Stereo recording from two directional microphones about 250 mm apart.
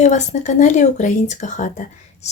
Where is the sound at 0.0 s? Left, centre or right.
Left.